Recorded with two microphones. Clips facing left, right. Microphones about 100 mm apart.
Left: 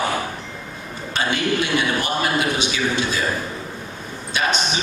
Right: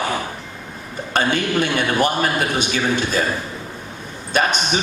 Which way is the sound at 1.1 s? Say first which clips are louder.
Right 3 dB; 50° right (ahead or behind).